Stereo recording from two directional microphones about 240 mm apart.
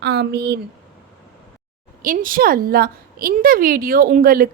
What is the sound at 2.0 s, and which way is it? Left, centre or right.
A woman's voice, right.